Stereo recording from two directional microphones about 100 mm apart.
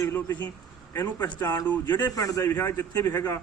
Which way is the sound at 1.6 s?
20° left (ahead or behind).